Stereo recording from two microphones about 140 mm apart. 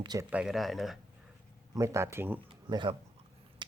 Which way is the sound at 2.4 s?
35° right (ahead or behind).